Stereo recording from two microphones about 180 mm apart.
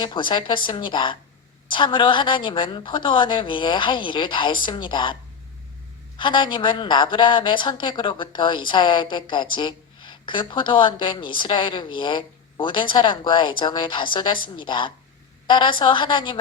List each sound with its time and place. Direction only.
0.0 s speech: 25° left (ahead or behind)
6.1 s speech: 25° left (ahead or behind)